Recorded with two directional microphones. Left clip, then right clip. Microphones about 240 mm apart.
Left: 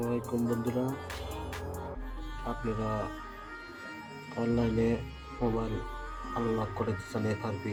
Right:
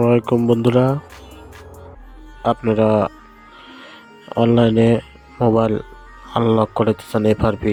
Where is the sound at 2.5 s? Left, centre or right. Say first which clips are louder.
Right 19 dB; right.